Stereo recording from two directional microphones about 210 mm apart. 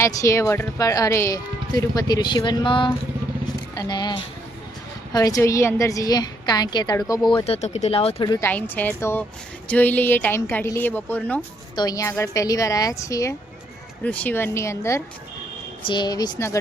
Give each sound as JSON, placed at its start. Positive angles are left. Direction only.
{"t": 0.0, "sound": "speech", "side_deg": 15}